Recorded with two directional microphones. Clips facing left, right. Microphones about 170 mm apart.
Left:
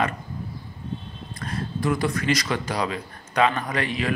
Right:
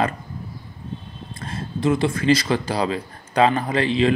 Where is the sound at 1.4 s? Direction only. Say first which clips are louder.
Right 3 dB; 25° right (ahead or behind).